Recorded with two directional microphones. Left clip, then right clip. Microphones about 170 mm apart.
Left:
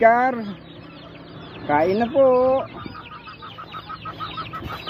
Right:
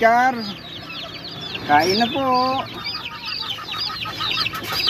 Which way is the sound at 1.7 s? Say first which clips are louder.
Right 3 dB; 60° left (ahead or behind).